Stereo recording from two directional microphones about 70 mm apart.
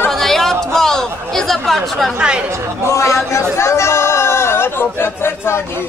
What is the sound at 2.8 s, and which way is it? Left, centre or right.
Speech, left.